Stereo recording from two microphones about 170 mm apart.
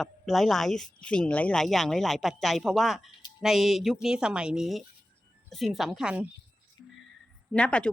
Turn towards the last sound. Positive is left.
turn(degrees=5)  # may be behind; listen again after turning